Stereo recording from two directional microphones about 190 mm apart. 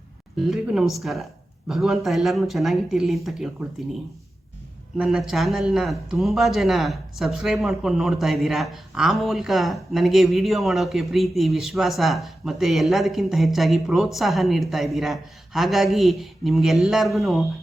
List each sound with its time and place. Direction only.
0.3 s speech: centre (ahead or behind)
4.9 s speech: centre (ahead or behind)